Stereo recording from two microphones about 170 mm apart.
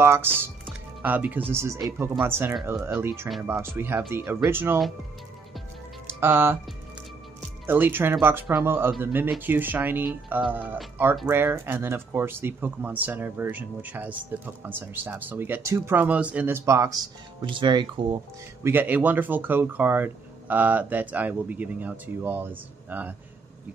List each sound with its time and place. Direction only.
0.0 s speech: 15° right (ahead or behind)
0.4 s music: 10° right (ahead or behind)
1.5 s speech: 15° right (ahead or behind)
6.0 s speech: 15° right (ahead or behind)
7.6 s speech: 10° right (ahead or behind)
17.5 s speech: 30° right (ahead or behind)
18.7 s speech: 10° right (ahead or behind)